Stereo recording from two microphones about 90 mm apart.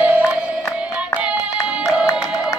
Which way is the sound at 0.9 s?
15° right (ahead or behind).